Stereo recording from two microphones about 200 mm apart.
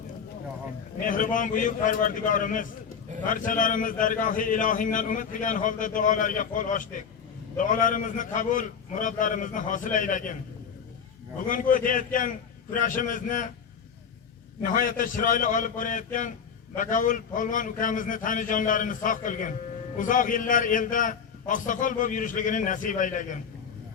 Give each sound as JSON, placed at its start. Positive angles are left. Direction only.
{"t": 0.9, "sound": "a man's voice", "side_deg": 45}
{"t": 11.4, "sound": "a man's voice", "side_deg": 40}
{"t": 14.6, "sound": "a man's voice", "side_deg": 45}